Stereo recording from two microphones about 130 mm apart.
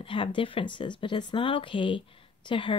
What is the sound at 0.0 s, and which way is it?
Speech, 40° left (ahead or behind).